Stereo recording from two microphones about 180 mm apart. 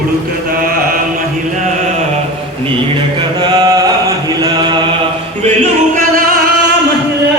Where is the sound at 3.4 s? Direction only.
20° right (ahead or behind).